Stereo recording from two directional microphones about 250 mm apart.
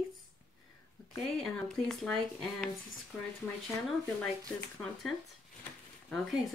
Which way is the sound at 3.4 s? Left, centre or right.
Centre.